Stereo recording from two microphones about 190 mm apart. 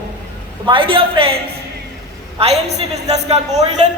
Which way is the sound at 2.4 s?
35° right (ahead or behind).